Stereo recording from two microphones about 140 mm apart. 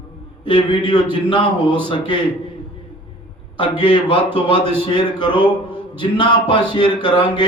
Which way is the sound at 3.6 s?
40° left (ahead or behind).